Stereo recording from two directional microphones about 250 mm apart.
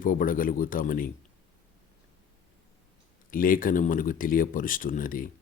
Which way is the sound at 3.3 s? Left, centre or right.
Left.